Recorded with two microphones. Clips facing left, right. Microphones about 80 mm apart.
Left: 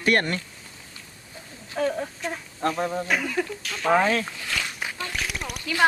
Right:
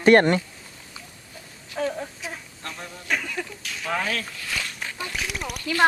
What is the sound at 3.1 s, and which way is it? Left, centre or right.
Speech, centre.